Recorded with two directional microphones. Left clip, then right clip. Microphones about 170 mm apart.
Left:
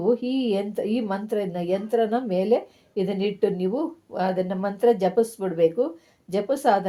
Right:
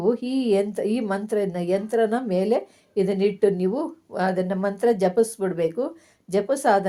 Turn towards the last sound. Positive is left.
turn(degrees=-35)  # may be behind; listen again after turning